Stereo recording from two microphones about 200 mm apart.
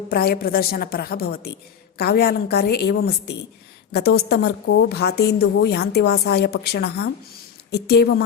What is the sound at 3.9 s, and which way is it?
A woman's voice, 50° left (ahead or behind).